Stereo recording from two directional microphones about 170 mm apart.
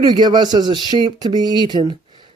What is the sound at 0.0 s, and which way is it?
Speech, 25° right (ahead or behind).